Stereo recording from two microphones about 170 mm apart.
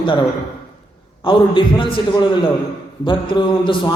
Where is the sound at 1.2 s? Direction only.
30° left (ahead or behind).